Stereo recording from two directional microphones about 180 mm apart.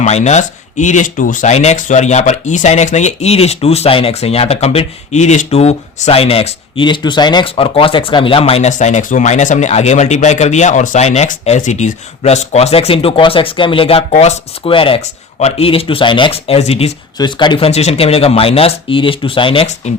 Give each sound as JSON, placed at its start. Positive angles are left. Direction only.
{"t": 0.0, "sound": "speech", "side_deg": 40}